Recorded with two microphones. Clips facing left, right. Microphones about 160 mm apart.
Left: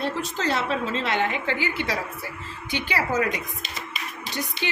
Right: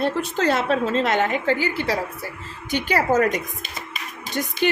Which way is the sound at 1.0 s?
45° right (ahead or behind).